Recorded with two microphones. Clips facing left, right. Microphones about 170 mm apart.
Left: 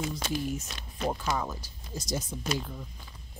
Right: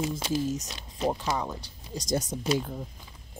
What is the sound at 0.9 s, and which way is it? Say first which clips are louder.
Speech: right 2 dB; 20° right (ahead or behind).